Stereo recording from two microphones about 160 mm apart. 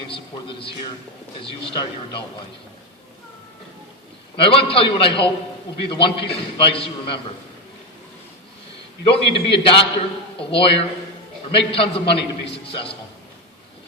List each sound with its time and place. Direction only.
0.1 s a sound: 35° left (ahead or behind)
1.4 s a man's voice: 30° left (ahead or behind)
4.4 s a man's voice: 35° left (ahead or behind)
9.0 s a man's voice: 35° left (ahead or behind)